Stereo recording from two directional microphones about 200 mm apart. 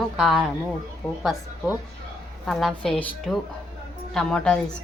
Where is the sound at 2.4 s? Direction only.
Centre (ahead or behind).